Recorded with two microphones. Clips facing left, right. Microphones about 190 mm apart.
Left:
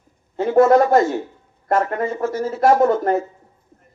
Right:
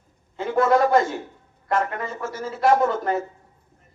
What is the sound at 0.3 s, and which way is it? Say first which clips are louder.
Speech: left 6 dB; 50° left (ahead or behind).